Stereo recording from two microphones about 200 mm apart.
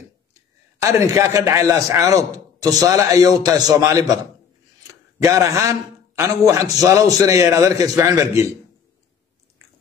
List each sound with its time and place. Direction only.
0.7 s a man's voice: 15° right (ahead or behind)
5.2 s a man's voice: 15° right (ahead or behind)